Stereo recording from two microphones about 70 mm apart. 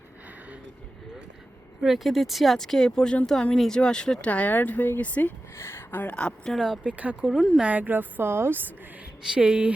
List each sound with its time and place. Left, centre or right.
1.8 s speech: centre; by 5.3 s left
5.5 s speech: left
6.1 s speech: centre
6.8 s speech: centre
7.3 s speech: centre
7.6 s speech: right
9.3 s speech: centre